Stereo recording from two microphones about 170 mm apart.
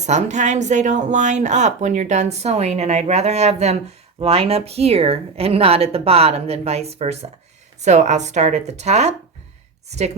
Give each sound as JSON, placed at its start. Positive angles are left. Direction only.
{"t": 0.0, "sound": "a woman's voice", "side_deg": -40}